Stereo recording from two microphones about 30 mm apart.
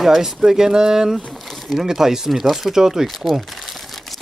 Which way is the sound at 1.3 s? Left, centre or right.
Centre.